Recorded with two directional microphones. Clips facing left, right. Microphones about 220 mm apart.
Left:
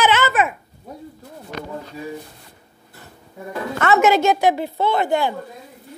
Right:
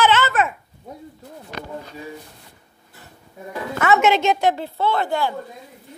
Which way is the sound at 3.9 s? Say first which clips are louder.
Left 4 dB; 5° left (ahead or behind).